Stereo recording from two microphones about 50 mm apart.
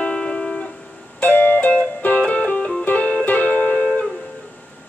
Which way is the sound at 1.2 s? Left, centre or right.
Left.